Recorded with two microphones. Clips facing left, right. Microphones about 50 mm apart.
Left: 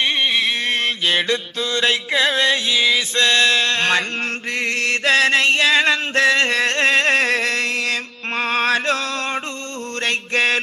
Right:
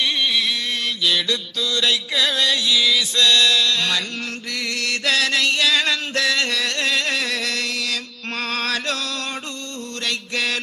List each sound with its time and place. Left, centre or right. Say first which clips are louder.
0.0 s mantra: left 2 dB; left
4.5 s music: left 4 dB; left
10.0 s mantra: left 6 dB; left